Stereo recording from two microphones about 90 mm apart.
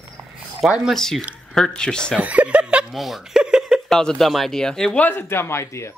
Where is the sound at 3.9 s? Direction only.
5° left (ahead or behind).